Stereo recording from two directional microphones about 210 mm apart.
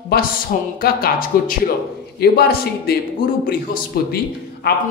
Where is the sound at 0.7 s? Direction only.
45° left (ahead or behind).